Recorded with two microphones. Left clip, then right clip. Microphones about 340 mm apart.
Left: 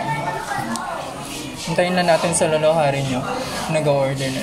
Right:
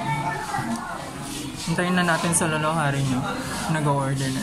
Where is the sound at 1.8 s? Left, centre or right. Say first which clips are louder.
Left 6 dB; left.